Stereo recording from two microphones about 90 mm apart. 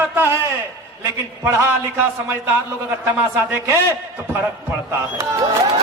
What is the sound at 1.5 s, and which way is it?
Speech, 25° right (ahead or behind).